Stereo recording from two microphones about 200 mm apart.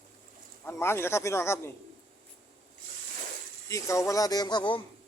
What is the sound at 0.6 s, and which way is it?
Speech, 10° left (ahead or behind).